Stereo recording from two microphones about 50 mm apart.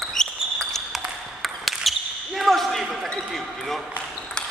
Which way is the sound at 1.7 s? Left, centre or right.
Centre.